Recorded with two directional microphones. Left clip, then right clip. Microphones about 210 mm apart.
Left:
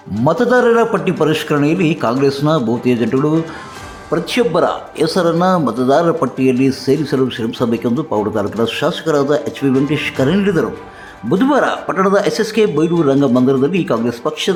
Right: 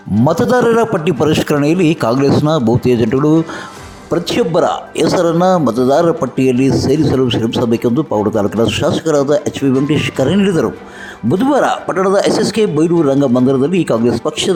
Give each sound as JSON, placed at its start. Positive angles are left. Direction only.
{"t": 0.3, "sound": "speech", "side_deg": -35}